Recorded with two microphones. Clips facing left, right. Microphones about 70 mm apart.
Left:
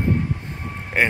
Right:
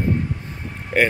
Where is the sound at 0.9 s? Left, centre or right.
Left.